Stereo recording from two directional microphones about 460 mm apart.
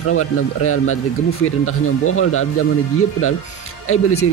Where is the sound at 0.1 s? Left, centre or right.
Left.